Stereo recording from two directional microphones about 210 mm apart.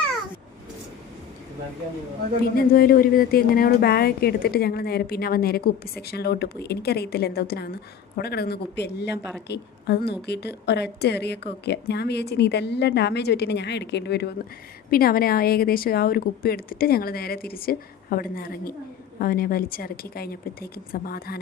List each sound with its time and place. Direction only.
2.6 s a woman's voice: 45° left (ahead or behind)